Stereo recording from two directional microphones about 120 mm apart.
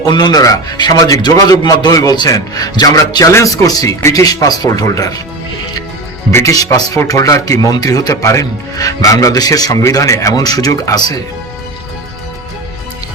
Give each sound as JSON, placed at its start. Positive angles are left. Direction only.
{"t": 0.0, "sound": "a man's voice", "side_deg": 35}
{"t": 6.3, "sound": "speech", "side_deg": 30}